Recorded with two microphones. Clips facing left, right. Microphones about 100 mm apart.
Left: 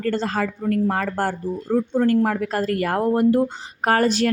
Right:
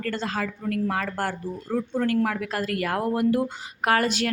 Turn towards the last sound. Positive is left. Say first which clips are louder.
# left 4 dB
turn(degrees=35)  # may be behind; listen again after turning